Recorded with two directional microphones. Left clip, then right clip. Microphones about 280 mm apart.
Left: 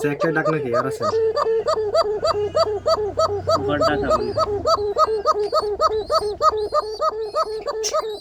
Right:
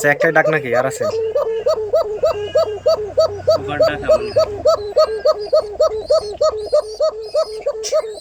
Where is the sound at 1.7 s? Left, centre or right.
Left.